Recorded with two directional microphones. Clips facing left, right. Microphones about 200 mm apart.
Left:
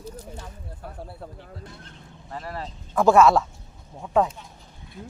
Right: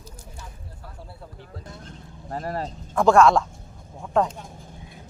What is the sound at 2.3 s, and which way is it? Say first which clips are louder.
Speech: right 5 dB; 40° right (ahead or behind).